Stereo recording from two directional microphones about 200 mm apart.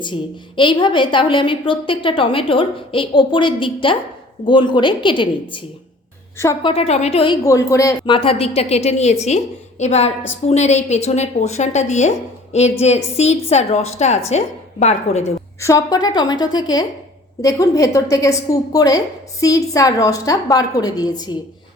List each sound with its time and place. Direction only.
0.0 s a woman's voice: 25° left (ahead or behind)
7.4 s a woman's voice: 15° left (ahead or behind); by 15.3 s 35° left (ahead or behind)
15.6 s a woman's voice: 15° left (ahead or behind)